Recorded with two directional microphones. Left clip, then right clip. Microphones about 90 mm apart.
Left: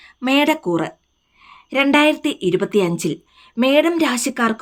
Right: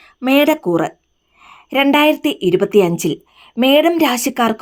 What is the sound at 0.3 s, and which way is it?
A woman's voice, 25° right (ahead or behind).